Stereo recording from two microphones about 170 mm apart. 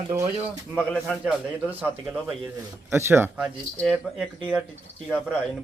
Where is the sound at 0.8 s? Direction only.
5° right (ahead or behind).